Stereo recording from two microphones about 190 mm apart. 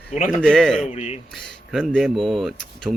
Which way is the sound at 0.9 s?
35° left (ahead or behind).